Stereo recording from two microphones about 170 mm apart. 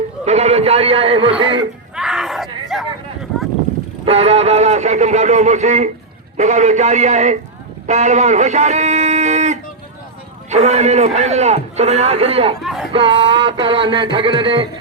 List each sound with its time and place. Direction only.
0.3 s a man's voice: 40° right (ahead or behind)
2.0 s a sound: centre (ahead or behind)
4.0 s a man's voice: 35° right (ahead or behind)
12.6 s speech: centre (ahead or behind)
12.9 s music: 30° right (ahead or behind)